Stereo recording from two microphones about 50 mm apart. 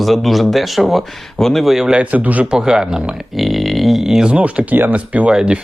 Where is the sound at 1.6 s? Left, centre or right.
Centre.